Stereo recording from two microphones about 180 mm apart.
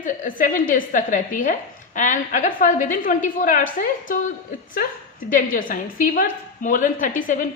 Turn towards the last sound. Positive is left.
turn(degrees=45)  # may be behind; listen again after turning